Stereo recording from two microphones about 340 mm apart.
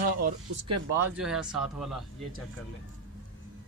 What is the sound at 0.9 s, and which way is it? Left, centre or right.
Speech, centre.